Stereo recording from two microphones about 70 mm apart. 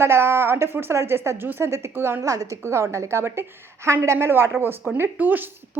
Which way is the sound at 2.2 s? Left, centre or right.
Right.